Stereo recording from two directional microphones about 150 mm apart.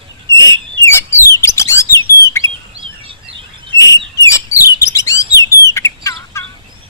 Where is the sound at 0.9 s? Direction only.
20° left (ahead or behind).